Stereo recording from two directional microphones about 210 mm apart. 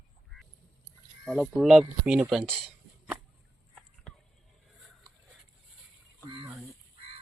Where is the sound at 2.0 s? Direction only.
5° right (ahead or behind).